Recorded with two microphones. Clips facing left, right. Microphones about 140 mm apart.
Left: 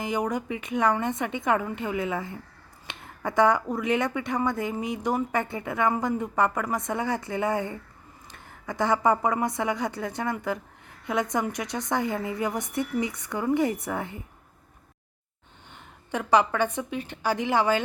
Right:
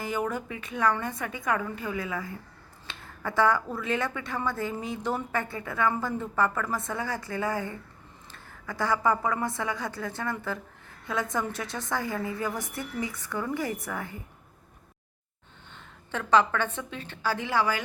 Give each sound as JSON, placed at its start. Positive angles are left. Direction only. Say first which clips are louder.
{"t": 0.0, "sound": "a woman's voice", "louder": "left 3 dB", "side_deg": 15}
{"t": 15.7, "sound": "a woman's voice", "louder": "left 4 dB", "side_deg": 15}